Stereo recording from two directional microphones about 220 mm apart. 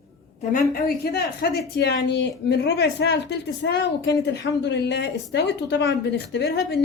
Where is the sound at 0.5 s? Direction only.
45° left (ahead or behind).